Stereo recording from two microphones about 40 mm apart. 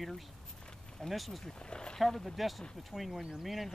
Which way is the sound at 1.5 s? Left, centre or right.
Left.